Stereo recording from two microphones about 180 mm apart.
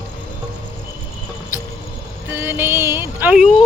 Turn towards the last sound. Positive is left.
turn(degrees=-10)  # may be behind; listen again after turning